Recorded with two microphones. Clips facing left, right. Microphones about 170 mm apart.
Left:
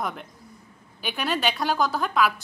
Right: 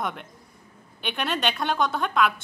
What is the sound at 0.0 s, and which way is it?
Speech, centre (ahead or behind).